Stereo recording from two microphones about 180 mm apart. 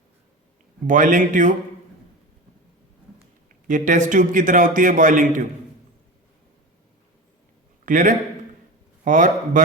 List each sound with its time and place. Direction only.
0.9 s a man's voice: 45° right (ahead or behind)
3.7 s a man's voice: 45° right (ahead or behind)
7.9 s a man's voice: 45° right (ahead or behind)